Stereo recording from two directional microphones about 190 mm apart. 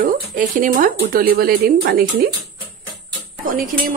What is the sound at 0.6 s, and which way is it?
Speech, 45° right (ahead or behind).